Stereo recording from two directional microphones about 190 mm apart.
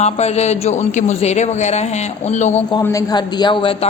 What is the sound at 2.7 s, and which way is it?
A man's voice, 15° left (ahead or behind).